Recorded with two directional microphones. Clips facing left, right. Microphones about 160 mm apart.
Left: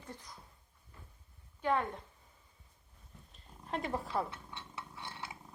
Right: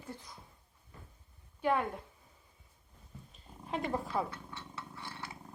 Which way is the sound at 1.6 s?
10° right (ahead or behind).